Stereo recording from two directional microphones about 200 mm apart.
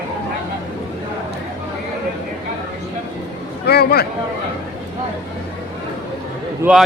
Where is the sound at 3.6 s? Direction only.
55° left (ahead or behind).